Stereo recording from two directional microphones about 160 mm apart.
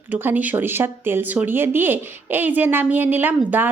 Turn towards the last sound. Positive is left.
turn(degrees=-10)  # may be behind; listen again after turning